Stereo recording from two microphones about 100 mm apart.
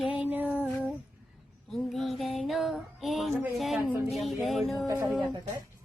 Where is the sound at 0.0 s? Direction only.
10° right (ahead or behind).